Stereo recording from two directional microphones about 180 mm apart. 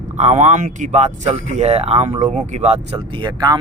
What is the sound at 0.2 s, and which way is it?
Speech, 40° right (ahead or behind).